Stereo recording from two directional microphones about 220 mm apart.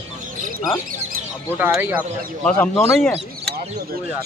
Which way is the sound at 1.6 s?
5° right (ahead or behind).